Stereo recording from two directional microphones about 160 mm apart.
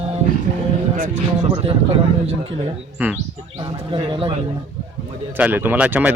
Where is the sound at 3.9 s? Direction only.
35° right (ahead or behind).